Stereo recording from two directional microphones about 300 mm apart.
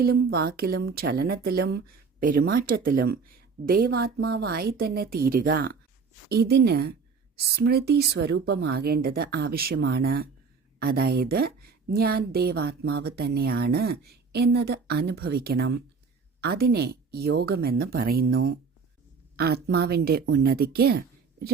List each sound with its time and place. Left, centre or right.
0.0 s a woman's voice: right